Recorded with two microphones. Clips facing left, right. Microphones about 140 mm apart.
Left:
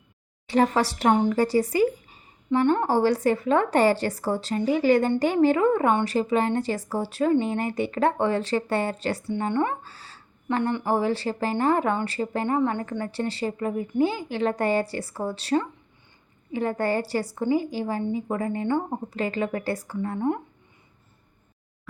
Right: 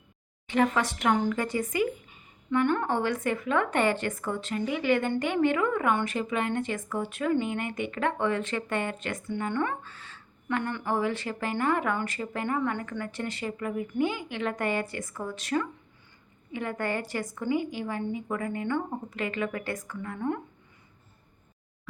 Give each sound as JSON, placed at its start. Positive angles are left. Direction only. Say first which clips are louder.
{"t": 0.4, "sound": "speech", "louder": "left 4 dB", "side_deg": 35}
{"t": 10.6, "sound": "speech", "louder": "left 5 dB", "side_deg": 25}